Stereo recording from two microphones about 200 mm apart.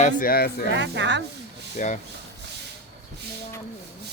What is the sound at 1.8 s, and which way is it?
Speech, 40° left (ahead or behind).